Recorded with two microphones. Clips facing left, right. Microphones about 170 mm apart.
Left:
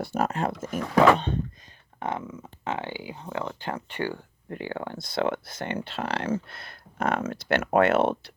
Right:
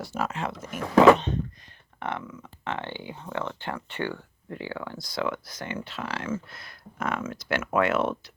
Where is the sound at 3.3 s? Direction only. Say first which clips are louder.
Left 1 dB; 35° left (ahead or behind).